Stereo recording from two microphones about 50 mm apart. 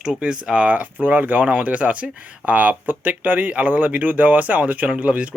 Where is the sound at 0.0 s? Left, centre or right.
Centre.